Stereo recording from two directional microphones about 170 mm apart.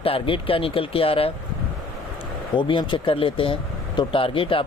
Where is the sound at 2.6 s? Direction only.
30° left (ahead or behind).